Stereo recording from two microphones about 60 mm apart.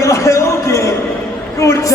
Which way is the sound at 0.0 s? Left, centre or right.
Left.